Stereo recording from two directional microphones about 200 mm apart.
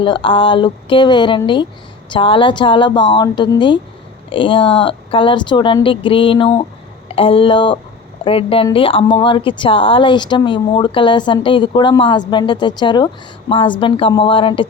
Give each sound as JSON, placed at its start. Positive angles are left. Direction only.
{"t": 0.0, "sound": "a woman's voice", "side_deg": 25}